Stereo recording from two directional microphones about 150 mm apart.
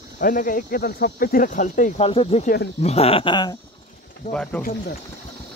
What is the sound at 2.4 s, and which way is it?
Speech, 90° left.